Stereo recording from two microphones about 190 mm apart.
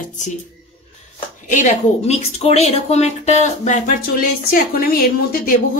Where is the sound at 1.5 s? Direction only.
40° left (ahead or behind).